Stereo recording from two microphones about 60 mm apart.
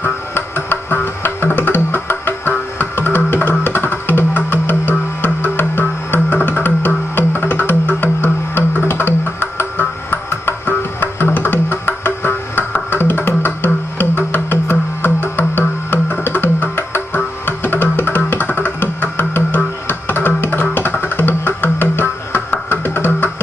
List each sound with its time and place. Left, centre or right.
0.0 s music: left
2.5 s tabla: left
3.6 s music: left